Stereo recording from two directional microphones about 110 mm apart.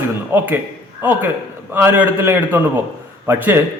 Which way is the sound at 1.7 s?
15° right (ahead or behind).